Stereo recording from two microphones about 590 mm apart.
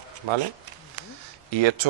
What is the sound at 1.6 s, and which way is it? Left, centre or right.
Speech, right.